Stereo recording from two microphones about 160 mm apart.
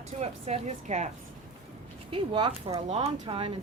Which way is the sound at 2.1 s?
30° right (ahead or behind).